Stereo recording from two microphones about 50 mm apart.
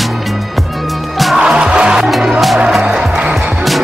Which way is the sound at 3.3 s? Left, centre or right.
Centre.